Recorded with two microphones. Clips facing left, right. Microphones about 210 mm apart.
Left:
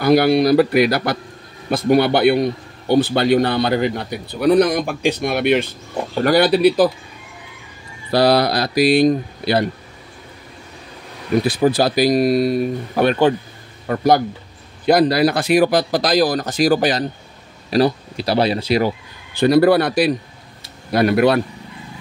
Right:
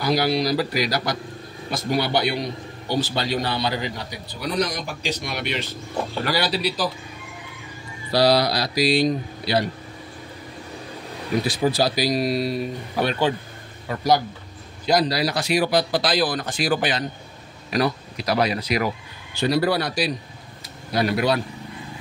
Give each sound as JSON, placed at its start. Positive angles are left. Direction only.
{"t": 0.0, "sound": "a man's voice", "side_deg": 55}
{"t": 8.1, "sound": "a man's voice", "side_deg": 55}
{"t": 11.4, "sound": "a man's voice", "side_deg": 55}
{"t": 19.3, "sound": "a man's voice", "side_deg": 55}